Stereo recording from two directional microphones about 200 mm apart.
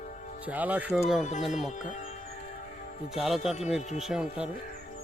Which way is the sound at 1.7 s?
35° left (ahead or behind).